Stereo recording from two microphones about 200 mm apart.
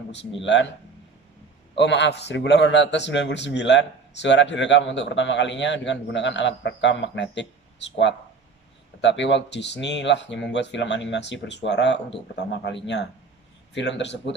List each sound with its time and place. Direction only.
0.4 s a man's voice: 65° left (ahead or behind)
1.8 s a man's voice: 60° left (ahead or behind)
9.0 s a man's voice: 65° left (ahead or behind)